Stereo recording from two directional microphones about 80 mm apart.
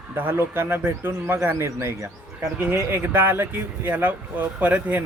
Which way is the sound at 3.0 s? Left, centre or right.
Right.